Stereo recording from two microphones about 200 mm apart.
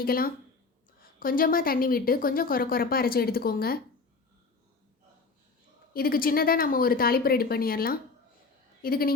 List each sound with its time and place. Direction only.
0.0 s a woman's voice: 45° left (ahead or behind)
5.9 s a woman's voice: 45° left (ahead or behind)